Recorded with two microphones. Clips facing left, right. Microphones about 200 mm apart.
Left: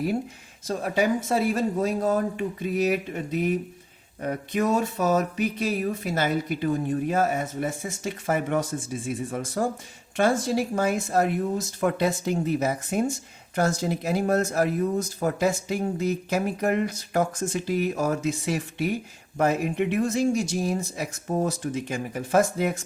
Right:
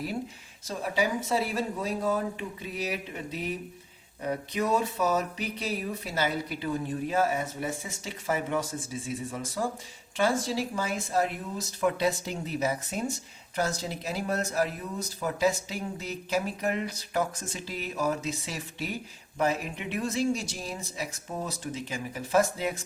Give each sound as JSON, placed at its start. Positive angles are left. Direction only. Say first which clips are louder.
{"t": 0.7, "sound": "speech", "louder": "left 5 dB", "side_deg": 50}